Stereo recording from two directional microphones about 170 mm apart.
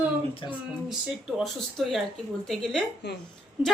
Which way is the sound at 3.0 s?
90° left.